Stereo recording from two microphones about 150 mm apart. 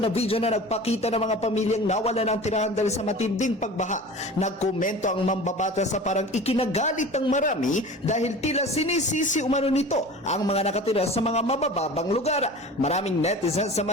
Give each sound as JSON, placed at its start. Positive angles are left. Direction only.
{"t": 0.0, "sound": "a man's voice", "side_deg": 40}